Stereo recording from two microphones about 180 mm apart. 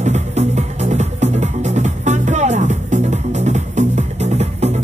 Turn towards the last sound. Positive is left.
turn(degrees=-35)  # may be behind; listen again after turning